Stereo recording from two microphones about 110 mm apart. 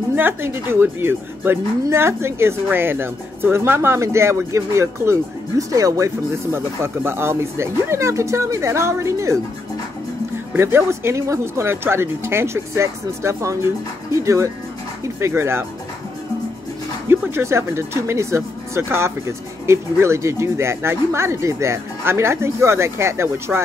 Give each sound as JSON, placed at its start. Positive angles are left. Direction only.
{"t": 0.1, "sound": "speech", "side_deg": -20}
{"t": 10.5, "sound": "speech", "side_deg": -20}
{"t": 17.1, "sound": "speech", "side_deg": -25}